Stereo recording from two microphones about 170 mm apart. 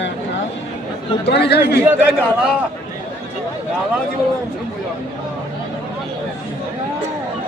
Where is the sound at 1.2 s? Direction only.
80° left.